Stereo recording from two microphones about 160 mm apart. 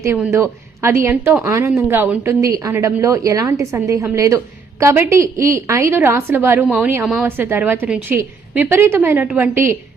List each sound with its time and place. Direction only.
0.3 s a woman's voice: 15° right (ahead or behind)